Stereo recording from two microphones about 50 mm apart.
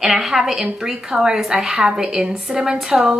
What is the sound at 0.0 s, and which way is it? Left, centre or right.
Speech, centre.